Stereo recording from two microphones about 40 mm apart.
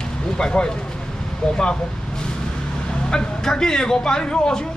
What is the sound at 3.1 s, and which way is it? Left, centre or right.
Speech, centre.